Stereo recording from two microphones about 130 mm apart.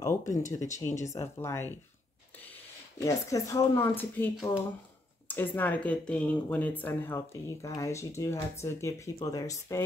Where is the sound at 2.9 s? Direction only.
25° left (ahead or behind).